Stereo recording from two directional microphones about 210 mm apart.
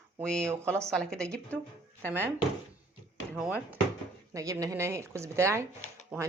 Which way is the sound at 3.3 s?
5° right (ahead or behind).